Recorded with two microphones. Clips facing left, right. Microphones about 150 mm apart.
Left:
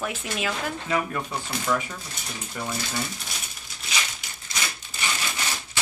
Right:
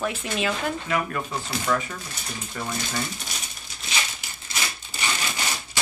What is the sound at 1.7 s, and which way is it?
Speech, 10° left (ahead or behind).